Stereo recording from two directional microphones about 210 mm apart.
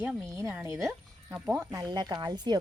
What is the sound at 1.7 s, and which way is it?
Speech, 15° right (ahead or behind).